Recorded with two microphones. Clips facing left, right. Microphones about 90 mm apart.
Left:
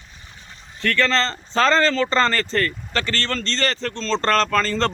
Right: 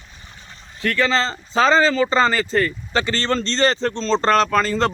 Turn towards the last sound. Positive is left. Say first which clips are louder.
# right 2 dB
turn(degrees=-10)  # may be behind; listen again after turning